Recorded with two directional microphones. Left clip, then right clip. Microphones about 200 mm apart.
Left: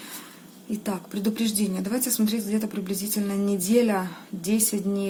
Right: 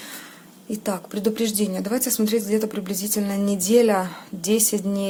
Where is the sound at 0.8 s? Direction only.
30° right (ahead or behind).